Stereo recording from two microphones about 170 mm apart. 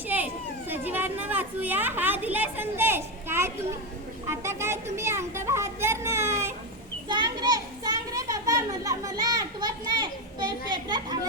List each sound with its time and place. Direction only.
0.7 s a woman's voice: 10° right (ahead or behind)